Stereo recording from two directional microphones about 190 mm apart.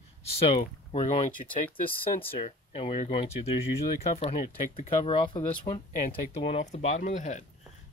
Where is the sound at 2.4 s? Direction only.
30° left (ahead or behind).